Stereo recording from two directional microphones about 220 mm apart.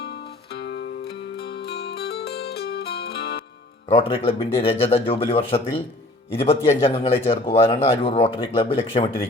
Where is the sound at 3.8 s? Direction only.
25° left (ahead or behind).